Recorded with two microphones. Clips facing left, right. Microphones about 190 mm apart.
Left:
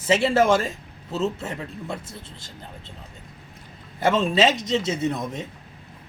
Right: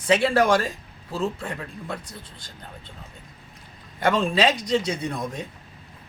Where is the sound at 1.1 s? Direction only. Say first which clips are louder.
Left 2 dB; 25° left (ahead or behind).